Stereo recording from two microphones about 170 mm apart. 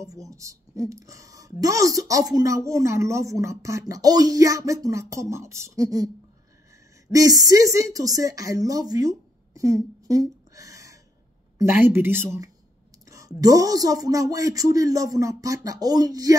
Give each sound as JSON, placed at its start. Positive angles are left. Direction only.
{"t": 0.0, "sound": "a woman's voice", "side_deg": -20}
{"t": 7.1, "sound": "a woman's voice", "side_deg": -20}